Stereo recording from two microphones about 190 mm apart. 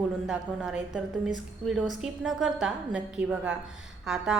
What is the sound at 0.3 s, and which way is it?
A woman's voice, 5° right (ahead or behind).